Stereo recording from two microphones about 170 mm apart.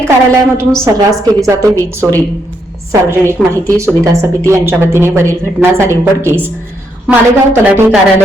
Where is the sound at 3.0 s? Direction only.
15° right (ahead or behind).